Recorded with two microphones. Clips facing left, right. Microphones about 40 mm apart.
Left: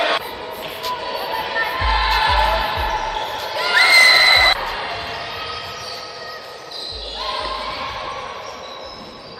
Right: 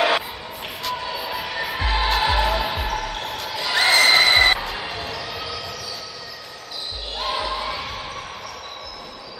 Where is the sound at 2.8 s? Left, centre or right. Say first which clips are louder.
Left 5 dB; centre.